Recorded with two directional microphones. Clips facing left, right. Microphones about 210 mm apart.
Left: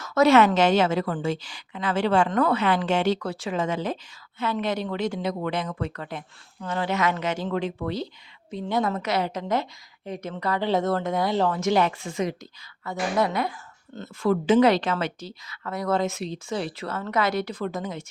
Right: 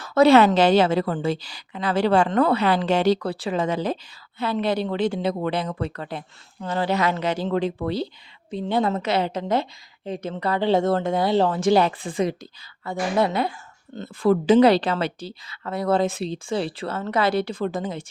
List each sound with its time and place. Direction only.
0.0 s speech: 30° right (ahead or behind)